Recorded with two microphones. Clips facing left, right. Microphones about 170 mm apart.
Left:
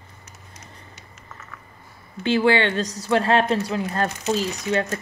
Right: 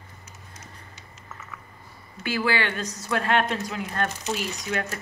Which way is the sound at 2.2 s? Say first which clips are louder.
Left 7 dB; 25° left (ahead or behind).